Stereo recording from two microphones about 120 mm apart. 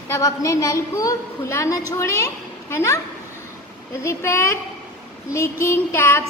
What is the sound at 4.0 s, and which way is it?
A woman's voice, 20° left (ahead or behind).